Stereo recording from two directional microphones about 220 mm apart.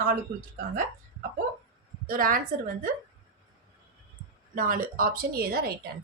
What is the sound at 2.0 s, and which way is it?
Speech, 40° right (ahead or behind).